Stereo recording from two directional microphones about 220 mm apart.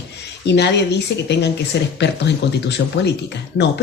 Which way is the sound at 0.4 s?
50° left (ahead or behind).